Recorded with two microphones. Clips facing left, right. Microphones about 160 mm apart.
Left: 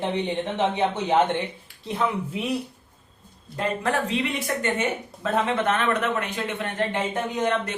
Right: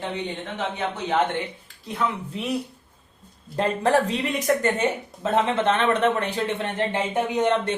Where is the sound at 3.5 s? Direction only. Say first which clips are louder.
Right 5 dB; 35° right (ahead or behind).